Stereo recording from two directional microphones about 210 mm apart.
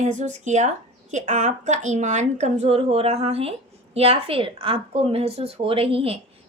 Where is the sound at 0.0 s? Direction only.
35° right (ahead or behind).